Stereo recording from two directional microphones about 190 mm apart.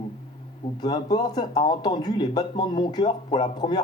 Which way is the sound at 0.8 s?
20° left (ahead or behind).